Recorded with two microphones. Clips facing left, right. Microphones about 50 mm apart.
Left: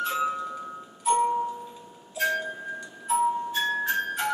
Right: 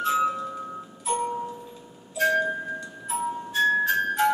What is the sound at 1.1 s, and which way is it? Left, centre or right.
Music, centre.